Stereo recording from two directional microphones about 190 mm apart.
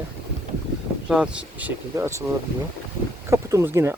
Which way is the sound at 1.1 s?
5° right (ahead or behind).